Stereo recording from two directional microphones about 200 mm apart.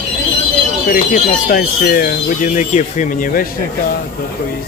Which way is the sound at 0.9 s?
50° left (ahead or behind).